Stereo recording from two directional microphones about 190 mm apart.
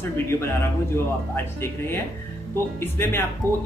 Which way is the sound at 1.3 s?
10° left (ahead or behind).